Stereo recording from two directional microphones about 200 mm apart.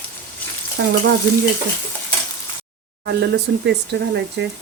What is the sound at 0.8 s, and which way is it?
Speech, 55° right (ahead or behind).